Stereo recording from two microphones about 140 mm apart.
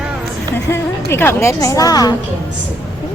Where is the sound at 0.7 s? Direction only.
20° left (ahead or behind).